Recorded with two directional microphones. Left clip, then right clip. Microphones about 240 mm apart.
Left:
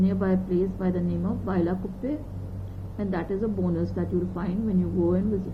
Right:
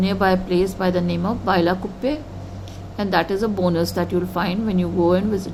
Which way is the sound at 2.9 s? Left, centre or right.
Right.